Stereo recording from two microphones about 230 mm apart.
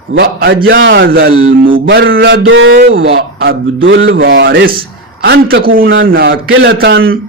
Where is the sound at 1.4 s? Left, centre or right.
Right.